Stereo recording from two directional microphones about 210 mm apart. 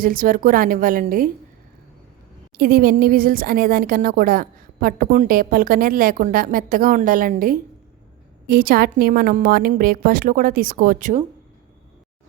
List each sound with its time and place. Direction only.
0.0 s speech: 40° right (ahead or behind)
2.6 s speech: 45° right (ahead or behind)